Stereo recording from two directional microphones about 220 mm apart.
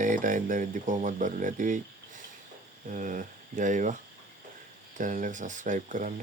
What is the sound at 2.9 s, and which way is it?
Speech, 35° right (ahead or behind).